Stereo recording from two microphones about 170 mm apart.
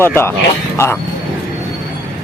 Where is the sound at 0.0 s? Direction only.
15° left (ahead or behind).